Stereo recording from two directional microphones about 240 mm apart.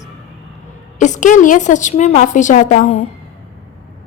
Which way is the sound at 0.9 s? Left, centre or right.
Left.